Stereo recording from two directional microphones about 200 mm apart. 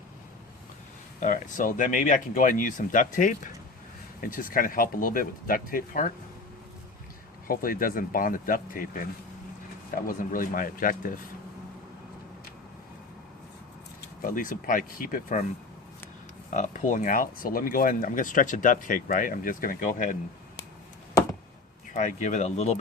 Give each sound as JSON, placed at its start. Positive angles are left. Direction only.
{"t": 1.2, "sound": "speech", "side_deg": 40}
{"t": 7.4, "sound": "speech", "side_deg": 45}
{"t": 10.1, "sound": "speech", "side_deg": 45}
{"t": 14.0, "sound": "speech", "side_deg": 45}
{"t": 16.5, "sound": "speech", "side_deg": 35}
{"t": 21.9, "sound": "speech", "side_deg": 40}